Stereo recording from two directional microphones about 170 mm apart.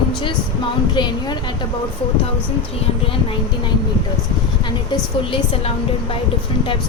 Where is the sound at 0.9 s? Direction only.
25° left (ahead or behind).